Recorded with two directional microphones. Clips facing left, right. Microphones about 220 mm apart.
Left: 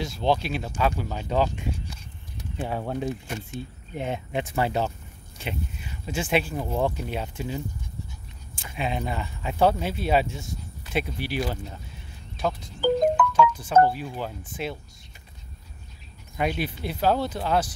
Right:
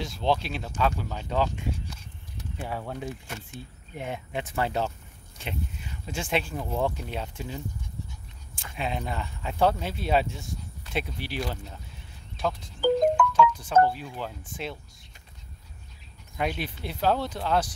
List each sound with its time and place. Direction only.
0.0 s speech: centre (ahead or behind)
2.5 s speech: 25° left (ahead or behind)
4.5 s speech: 10° left (ahead or behind)
8.6 s speech: 5° left (ahead or behind)
13.3 s speech: 5° left (ahead or behind)
16.3 s speech: 5° left (ahead or behind)